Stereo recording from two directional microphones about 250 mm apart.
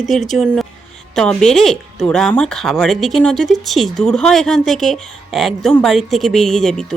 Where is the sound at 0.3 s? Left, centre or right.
Centre.